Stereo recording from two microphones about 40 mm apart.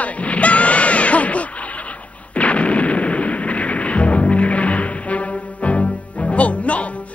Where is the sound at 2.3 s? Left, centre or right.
Left.